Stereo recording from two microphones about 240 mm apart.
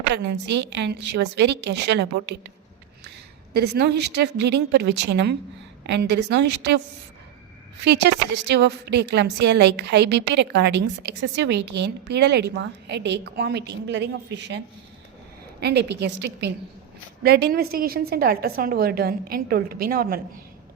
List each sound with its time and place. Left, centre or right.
0.1 s a woman's voice: right
3.5 s a woman's voice: right
7.9 s a woman's voice: right
15.6 s a woman's voice: right